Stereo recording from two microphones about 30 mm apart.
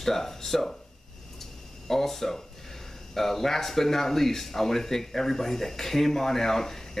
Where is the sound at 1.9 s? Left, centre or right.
Centre.